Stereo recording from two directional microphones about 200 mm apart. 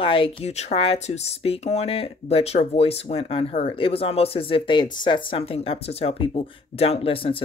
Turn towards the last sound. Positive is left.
turn(degrees=25)  # may be behind; listen again after turning